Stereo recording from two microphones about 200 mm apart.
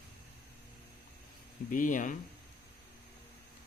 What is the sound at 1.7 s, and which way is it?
Speech, 40° left (ahead or behind).